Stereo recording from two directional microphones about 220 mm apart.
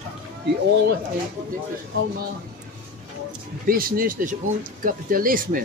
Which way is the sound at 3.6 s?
40° right (ahead or behind).